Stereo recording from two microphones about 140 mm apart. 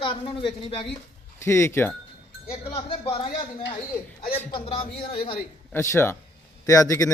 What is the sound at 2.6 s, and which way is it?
Speech, 35° left (ahead or behind).